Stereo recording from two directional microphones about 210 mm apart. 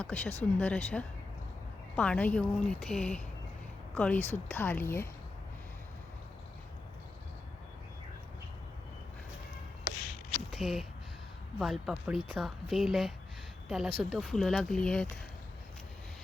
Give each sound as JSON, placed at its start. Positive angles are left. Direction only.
{"t": 0.0, "sound": "speech", "side_deg": 5}
{"t": 10.5, "sound": "speech", "side_deg": 0}